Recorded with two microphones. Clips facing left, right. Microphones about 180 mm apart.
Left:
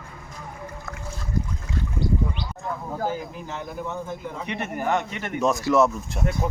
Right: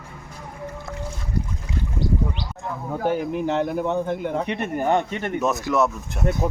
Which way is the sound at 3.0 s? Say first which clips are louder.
Right 9 dB; 65° right (ahead or behind).